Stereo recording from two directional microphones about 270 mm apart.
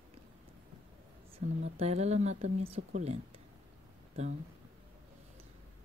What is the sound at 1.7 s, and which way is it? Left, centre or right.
Speech, right.